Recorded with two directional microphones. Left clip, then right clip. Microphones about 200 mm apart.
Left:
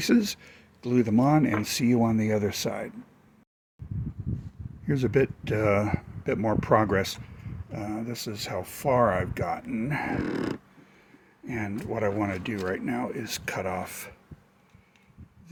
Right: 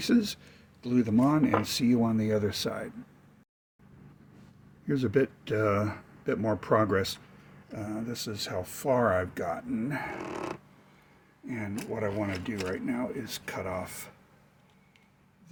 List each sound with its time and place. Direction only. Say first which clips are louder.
0.0 s speech: left 3 dB; 45° left (ahead or behind)
4.9 s speech: left 2 dB; 40° left (ahead or behind)
11.4 s speech: left 3 dB; 50° left (ahead or behind)